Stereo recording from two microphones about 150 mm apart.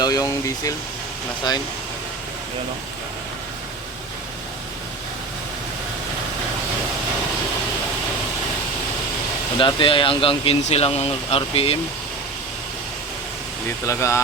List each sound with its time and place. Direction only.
0.0 s speech: 25° left (ahead or behind)
9.6 s speech: 35° left (ahead or behind)
13.8 s speech: 20° left (ahead or behind)